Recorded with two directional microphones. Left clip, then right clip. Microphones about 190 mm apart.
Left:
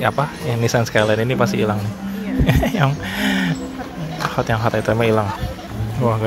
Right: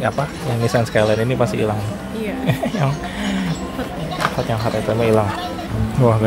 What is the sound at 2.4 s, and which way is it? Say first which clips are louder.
Music: left 4 dB; 25° left (ahead or behind).